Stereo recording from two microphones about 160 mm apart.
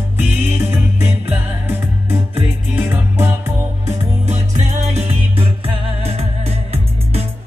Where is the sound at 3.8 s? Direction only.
45° right (ahead or behind).